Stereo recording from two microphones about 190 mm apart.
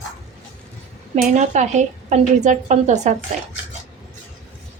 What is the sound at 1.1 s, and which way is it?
A woman's voice, 40° right (ahead or behind).